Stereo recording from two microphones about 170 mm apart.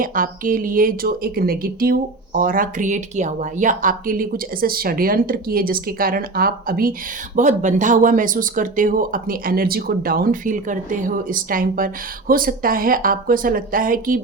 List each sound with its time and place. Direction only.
0.0 s speech: 55° right (ahead or behind)
7.3 s speech: 45° right (ahead or behind)